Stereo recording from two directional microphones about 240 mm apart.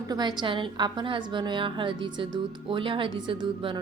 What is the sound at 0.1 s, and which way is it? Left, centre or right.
A woman's voice, centre.